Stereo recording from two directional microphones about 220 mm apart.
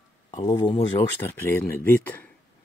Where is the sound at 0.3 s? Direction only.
20° left (ahead or behind).